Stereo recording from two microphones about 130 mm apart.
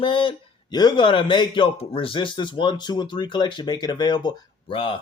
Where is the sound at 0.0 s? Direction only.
40° left (ahead or behind).